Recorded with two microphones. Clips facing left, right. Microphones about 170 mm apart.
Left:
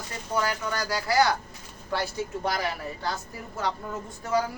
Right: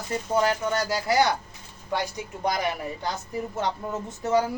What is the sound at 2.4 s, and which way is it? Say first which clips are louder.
A man's voice: right 6 dB; 20° right (ahead or behind).